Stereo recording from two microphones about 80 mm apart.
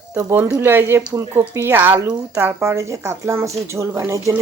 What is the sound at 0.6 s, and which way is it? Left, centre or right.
Speech, right.